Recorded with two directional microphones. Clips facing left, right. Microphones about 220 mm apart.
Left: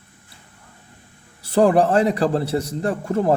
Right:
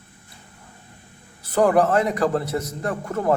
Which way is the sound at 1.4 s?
30° left (ahead or behind).